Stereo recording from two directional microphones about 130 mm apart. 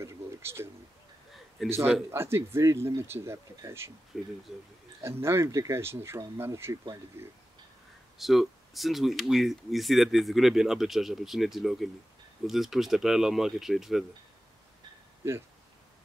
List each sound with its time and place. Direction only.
0.0 s a sound: 20° right (ahead or behind)
1.7 s speech: 20° right (ahead or behind)
4.1 s speech: centre (ahead or behind)
5.0 s speech: 20° right (ahead or behind)
8.2 s speech: centre (ahead or behind)